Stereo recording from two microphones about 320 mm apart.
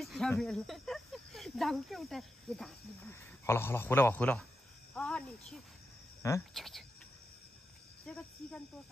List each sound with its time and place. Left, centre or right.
0.0 s speech: centre
8.0 s speech: centre